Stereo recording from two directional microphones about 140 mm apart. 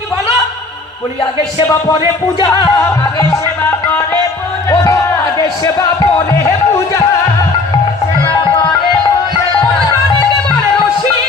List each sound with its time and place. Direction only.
2.4 s music: 30° left (ahead or behind)